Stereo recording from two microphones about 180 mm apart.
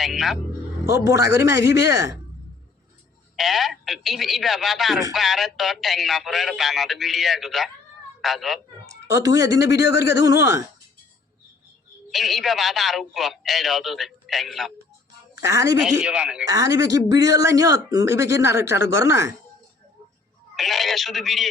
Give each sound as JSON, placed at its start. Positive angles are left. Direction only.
{"t": 0.0, "sound": "speech", "side_deg": 0}
{"t": 1.3, "sound": "speech", "side_deg": -15}
{"t": 3.3, "sound": "speech", "side_deg": 0}
{"t": 8.9, "sound": "speech", "side_deg": -20}
{"t": 9.7, "sound": "speech", "side_deg": 70}
{"t": 10.2, "sound": "speech", "side_deg": -15}
{"t": 12.1, "sound": "speech", "side_deg": 0}
{"t": 15.4, "sound": "speech", "side_deg": -15}
{"t": 15.8, "sound": "speech", "side_deg": -5}
{"t": 16.5, "sound": "speech", "side_deg": -20}
{"t": 20.6, "sound": "speech", "side_deg": 0}